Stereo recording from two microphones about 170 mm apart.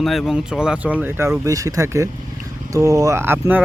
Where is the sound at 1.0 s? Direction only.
15° right (ahead or behind).